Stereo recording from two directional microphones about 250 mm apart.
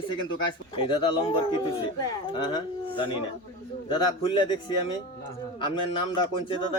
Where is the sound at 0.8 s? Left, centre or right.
Centre.